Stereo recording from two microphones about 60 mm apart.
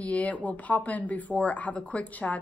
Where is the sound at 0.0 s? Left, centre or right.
Left.